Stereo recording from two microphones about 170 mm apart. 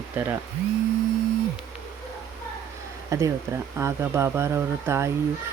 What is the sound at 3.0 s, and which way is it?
Speech, 20° right (ahead or behind).